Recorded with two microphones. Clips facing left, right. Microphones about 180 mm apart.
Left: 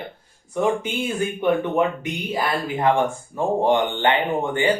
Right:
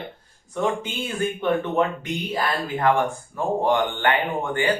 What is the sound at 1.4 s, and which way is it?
Speech, 15° left (ahead or behind).